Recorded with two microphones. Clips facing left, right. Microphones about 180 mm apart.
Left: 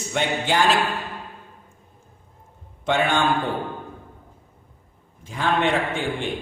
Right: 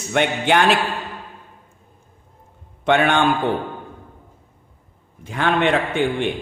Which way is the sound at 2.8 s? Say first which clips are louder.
Right 5 dB; 65° right (ahead or behind).